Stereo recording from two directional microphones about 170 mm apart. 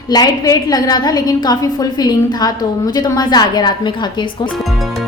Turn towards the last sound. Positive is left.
turn(degrees=25)  # may be behind; listen again after turning